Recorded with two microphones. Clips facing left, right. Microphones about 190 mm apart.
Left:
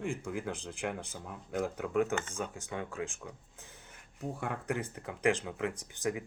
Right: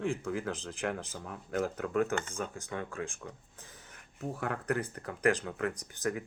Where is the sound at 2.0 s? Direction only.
Centre (ahead or behind).